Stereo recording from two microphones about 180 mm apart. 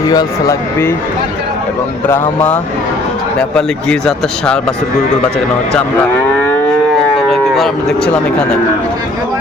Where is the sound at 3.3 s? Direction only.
5° left (ahead or behind).